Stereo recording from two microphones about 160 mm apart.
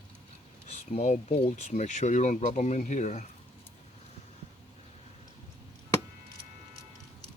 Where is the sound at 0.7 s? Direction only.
45° left (ahead or behind).